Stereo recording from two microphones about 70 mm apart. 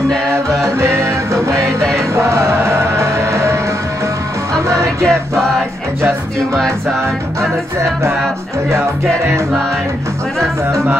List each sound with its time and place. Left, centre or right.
0.7 s music: right
5.0 s music: centre